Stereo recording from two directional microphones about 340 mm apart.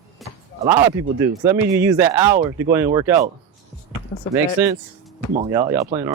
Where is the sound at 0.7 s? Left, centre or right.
Centre.